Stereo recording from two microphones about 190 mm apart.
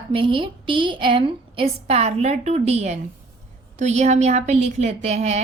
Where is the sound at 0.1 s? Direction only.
30° right (ahead or behind).